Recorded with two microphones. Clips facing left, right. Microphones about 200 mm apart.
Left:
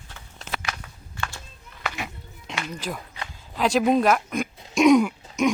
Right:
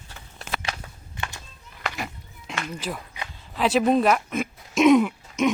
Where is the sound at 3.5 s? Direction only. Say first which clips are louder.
Even; centre (ahead or behind).